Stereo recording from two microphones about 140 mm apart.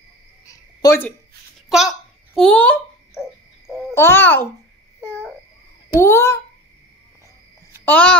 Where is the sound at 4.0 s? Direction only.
15° left (ahead or behind).